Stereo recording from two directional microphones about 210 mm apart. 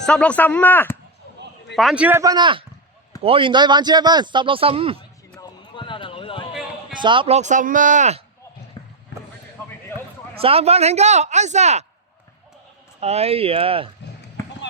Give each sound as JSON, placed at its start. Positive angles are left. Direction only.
{"t": 0.0, "sound": "speech", "side_deg": 5}
{"t": 1.7, "sound": "a man's voice", "side_deg": 0}
{"t": 5.4, "sound": "basketball bounce", "side_deg": 25}
{"t": 6.9, "sound": "speech", "side_deg": -20}
{"t": 8.8, "sound": "clip-clop", "side_deg": 25}
{"t": 10.4, "sound": "speech", "side_deg": -30}
{"t": 13.0, "sound": "speech", "side_deg": -30}